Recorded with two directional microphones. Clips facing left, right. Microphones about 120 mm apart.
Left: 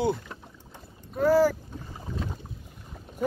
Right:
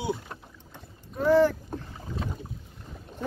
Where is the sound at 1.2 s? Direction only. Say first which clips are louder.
Even; 5° left (ahead or behind).